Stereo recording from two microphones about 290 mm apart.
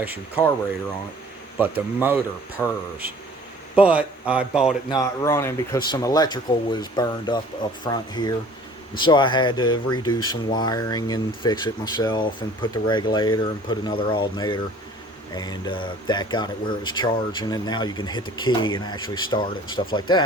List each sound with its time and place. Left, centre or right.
0.0 s speech: centre
1.5 s speech: centre
2.6 s speech: centre
3.8 s speech: centre
4.9 s speech: centre